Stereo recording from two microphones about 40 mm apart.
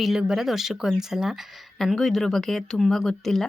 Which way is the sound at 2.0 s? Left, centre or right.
Centre.